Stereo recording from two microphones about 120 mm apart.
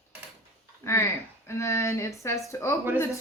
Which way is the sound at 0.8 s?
25° left (ahead or behind).